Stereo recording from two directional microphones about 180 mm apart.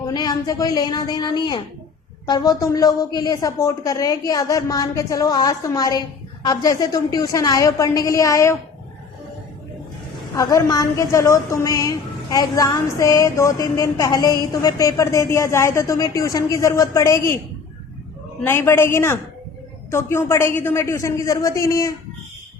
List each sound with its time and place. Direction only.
0.1 s a woman's voice: 20° left (ahead or behind)
10.3 s a woman's voice: 20° left (ahead or behind)
18.4 s a woman's voice: 15° left (ahead or behind)